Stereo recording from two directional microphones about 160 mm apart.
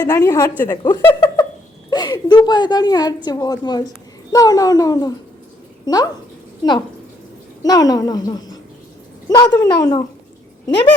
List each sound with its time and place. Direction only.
0.0 s a child's voice: 20° left (ahead or behind)
1.0 s a sound: 15° left (ahead or behind)
1.9 s a child's voice: 25° left (ahead or behind)